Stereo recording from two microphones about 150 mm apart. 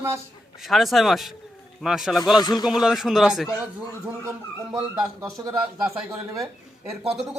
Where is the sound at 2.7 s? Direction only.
5° right (ahead or behind).